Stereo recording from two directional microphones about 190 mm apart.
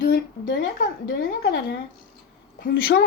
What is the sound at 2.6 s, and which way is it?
Speech, 50° left (ahead or behind).